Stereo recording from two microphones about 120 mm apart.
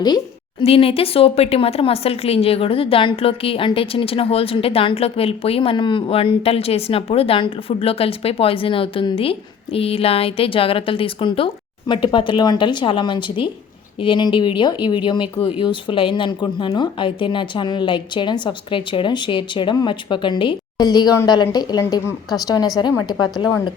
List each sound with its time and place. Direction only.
0.6 s speech: 55° left (ahead or behind); by 22.0 s 35° left (ahead or behind)
23.4 s speech: 45° left (ahead or behind)